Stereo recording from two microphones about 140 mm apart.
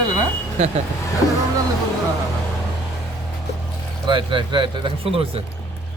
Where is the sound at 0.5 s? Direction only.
55° right (ahead or behind).